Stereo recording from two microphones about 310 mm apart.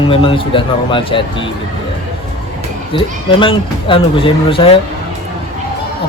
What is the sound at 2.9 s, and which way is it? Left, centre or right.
Speech, centre.